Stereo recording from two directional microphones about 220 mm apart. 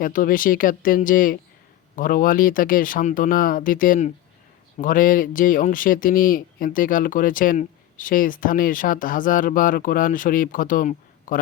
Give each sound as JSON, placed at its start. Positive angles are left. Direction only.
{"t": 0.0, "sound": "speech", "side_deg": 40}